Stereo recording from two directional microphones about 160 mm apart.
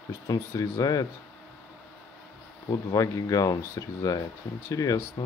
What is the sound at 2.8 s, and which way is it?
Speech, 20° left (ahead or behind).